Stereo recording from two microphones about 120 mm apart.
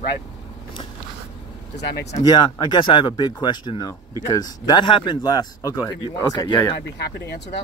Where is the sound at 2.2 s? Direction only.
35° left (ahead or behind).